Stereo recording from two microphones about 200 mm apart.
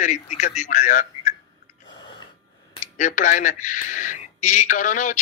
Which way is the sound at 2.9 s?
40° left (ahead or behind).